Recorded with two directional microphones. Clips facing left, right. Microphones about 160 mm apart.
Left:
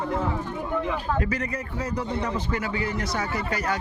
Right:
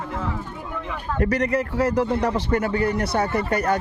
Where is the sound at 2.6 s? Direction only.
55° right (ahead or behind).